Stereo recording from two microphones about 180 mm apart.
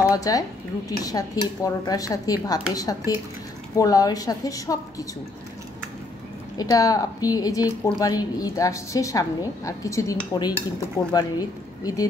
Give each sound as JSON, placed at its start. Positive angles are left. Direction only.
{"t": 0.0, "sound": "a woman's voice", "side_deg": 20}
{"t": 6.5, "sound": "a woman's voice", "side_deg": 20}